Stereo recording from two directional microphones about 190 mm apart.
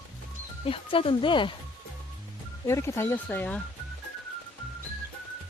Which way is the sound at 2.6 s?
15° left (ahead or behind).